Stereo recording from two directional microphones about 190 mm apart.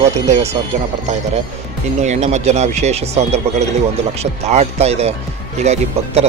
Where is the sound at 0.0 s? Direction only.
35° right (ahead or behind).